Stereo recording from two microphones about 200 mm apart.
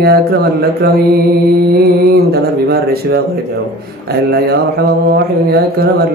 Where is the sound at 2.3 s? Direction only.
50° right (ahead or behind).